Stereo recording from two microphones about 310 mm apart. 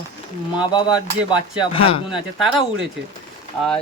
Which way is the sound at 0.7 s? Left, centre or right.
Centre.